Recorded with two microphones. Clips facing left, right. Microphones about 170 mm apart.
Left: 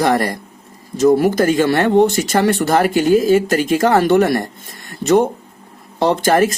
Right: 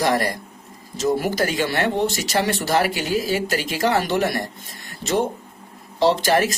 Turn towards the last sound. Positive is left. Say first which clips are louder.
# left 4 dB
turn(degrees=50)  # may be behind; listen again after turning